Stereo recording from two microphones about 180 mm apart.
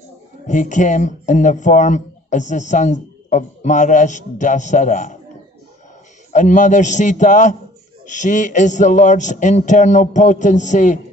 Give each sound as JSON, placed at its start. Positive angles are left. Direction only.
{"t": 0.5, "sound": "speech", "side_deg": 45}
{"t": 6.3, "sound": "speech", "side_deg": 45}